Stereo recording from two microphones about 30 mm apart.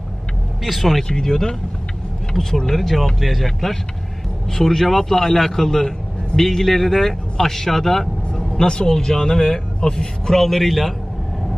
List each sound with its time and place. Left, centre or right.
0.7 s speech: centre
1.0 s a man's voice: centre
3.2 s a man's voice: centre
8.6 s speech: left
10.3 s a man's voice: centre